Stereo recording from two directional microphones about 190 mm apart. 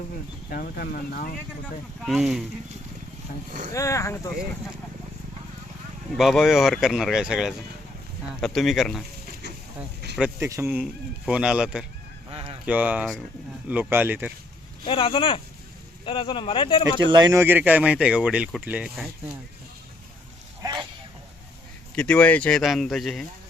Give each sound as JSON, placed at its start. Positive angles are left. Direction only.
{"t": 0.5, "sound": "speech", "side_deg": 50}
{"t": 2.0, "sound": "speech", "side_deg": 0}
{"t": 3.8, "sound": "speech", "side_deg": 15}
{"t": 6.1, "sound": "speech", "side_deg": 0}
{"t": 10.4, "sound": "speech", "side_deg": -15}
{"t": 12.3, "sound": "honk", "side_deg": -30}
{"t": 12.6, "sound": "speech", "side_deg": -5}
{"t": 14.8, "sound": "speech", "side_deg": 25}
{"t": 17.0, "sound": "speech", "side_deg": -25}
{"t": 17.4, "sound": "speech", "side_deg": -10}
{"t": 20.6, "sound": "a sound", "side_deg": -25}
{"t": 21.9, "sound": "speech", "side_deg": 5}